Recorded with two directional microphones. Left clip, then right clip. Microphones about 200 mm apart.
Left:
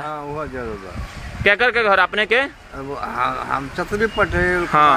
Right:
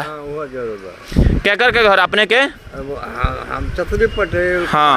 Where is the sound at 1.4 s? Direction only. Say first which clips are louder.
Right 2 dB; 50° right (ahead or behind).